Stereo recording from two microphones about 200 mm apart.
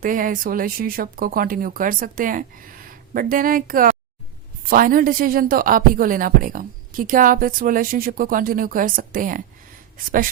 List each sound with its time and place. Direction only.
0.0 s a woman's voice: 45° right (ahead or behind)